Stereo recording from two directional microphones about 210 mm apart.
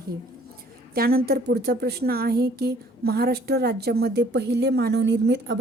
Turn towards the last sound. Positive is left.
turn(degrees=-55)  # may be behind; listen again after turning